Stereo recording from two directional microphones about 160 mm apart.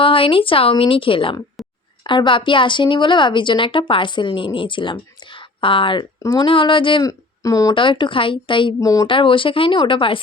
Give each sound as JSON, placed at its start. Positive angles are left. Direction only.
{"t": 0.0, "sound": "a woman's voice", "side_deg": 35}
{"t": 1.6, "sound": "a sound", "side_deg": 0}
{"t": 2.0, "sound": "a woman's voice", "side_deg": 30}
{"t": 9.1, "sound": "a woman's voice", "side_deg": 30}